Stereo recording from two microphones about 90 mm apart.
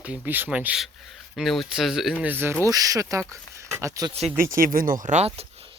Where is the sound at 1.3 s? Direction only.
Centre (ahead or behind).